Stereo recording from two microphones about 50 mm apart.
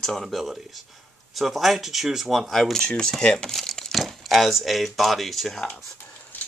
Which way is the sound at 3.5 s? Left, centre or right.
Centre.